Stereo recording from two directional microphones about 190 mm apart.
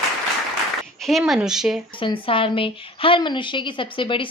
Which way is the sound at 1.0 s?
Centre (ahead or behind).